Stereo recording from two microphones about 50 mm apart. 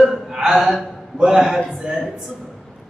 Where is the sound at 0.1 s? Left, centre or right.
Centre.